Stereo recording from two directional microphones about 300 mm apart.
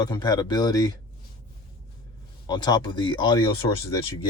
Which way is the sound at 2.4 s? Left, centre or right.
Centre.